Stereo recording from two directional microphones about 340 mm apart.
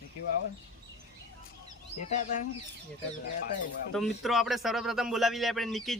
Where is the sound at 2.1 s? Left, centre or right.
Left.